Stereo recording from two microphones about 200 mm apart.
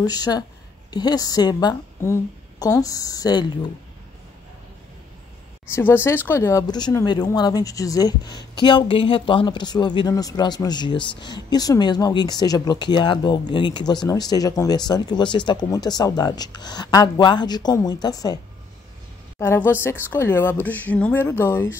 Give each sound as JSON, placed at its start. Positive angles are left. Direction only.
{"t": 0.0, "sound": "speech", "side_deg": 20}
{"t": 5.8, "sound": "a woman's voice", "side_deg": 10}